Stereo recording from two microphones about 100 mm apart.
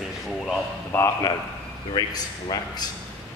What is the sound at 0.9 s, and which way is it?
Speech, 20° left (ahead or behind).